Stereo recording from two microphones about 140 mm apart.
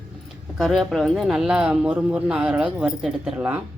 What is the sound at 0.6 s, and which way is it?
Speech, centre (ahead or behind).